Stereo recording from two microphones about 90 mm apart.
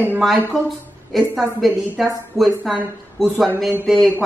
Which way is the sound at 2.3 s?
30° left (ahead or behind).